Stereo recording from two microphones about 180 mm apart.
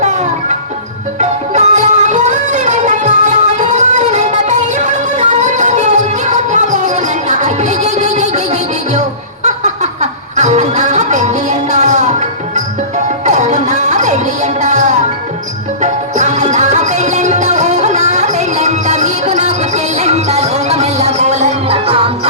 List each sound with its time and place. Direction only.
0.0 s music: 40° right (ahead or behind)
13.2 s music: 40° right (ahead or behind)